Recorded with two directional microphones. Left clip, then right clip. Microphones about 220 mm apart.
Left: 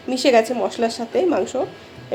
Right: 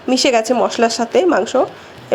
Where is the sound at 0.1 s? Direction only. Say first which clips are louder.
Right 2 dB; 20° right (ahead or behind).